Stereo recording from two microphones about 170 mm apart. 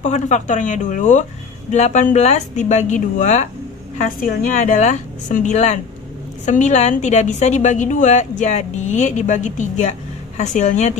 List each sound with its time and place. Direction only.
0.0 s a woman's voice: 45° left (ahead or behind)